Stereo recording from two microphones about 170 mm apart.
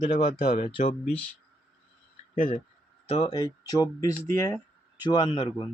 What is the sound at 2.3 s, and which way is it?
Speech, 30° left (ahead or behind).